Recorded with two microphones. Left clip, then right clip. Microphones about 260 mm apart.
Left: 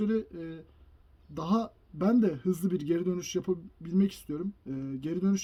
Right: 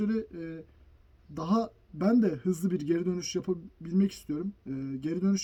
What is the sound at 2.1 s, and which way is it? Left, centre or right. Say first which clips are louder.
Speech: right 1 dB; centre.